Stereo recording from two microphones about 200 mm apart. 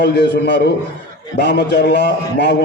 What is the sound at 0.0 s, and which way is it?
A man's voice, 55° left (ahead or behind).